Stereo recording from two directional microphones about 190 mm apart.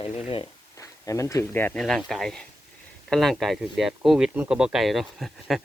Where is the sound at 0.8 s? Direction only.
15° left (ahead or behind).